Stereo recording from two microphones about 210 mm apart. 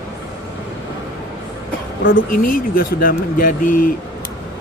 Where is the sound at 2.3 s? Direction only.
40° left (ahead or behind).